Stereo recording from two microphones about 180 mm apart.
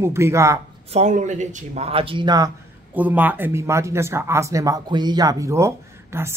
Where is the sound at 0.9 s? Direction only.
40° right (ahead or behind); by 2.5 s 25° right (ahead or behind).